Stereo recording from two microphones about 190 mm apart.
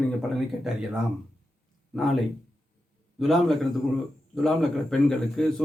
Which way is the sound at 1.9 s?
Centre (ahead or behind).